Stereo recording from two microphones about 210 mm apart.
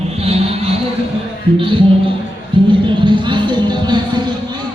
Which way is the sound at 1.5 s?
25° right (ahead or behind).